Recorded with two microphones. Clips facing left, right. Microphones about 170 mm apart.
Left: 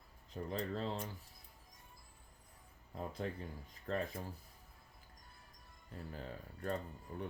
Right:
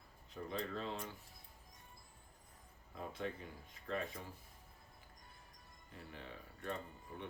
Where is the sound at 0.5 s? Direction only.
35° left (ahead or behind).